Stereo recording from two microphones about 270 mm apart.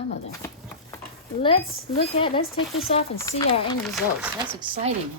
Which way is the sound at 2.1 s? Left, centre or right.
Centre.